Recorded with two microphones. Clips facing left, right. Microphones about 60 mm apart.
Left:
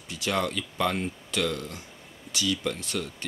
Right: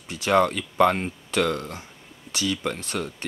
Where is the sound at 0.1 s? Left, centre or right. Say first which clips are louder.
Right 8 dB; right.